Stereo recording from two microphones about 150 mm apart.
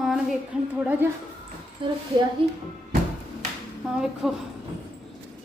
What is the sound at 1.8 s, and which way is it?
Speech, 35° right (ahead or behind).